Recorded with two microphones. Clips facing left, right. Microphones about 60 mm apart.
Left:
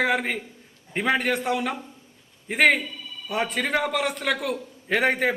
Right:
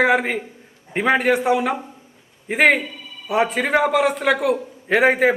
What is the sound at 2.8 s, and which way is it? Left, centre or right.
Speech, right.